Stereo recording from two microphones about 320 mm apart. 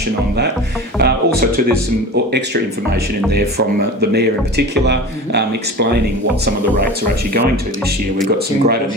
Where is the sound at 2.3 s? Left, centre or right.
Right.